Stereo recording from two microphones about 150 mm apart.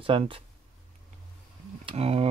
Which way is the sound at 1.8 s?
40° right (ahead or behind).